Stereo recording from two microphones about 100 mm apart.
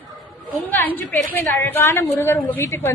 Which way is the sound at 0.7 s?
20° left (ahead or behind).